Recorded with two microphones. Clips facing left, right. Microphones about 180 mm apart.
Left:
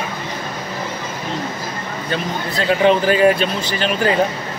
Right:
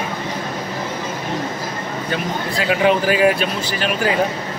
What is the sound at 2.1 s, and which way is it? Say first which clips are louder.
Speech: left 1 dB; 5° right (ahead or behind).